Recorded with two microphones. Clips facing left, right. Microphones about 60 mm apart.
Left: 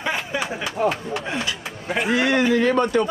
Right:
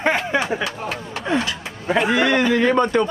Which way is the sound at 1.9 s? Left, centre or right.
Right.